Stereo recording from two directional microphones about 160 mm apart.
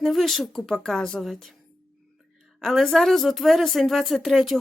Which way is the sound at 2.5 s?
Centre (ahead or behind).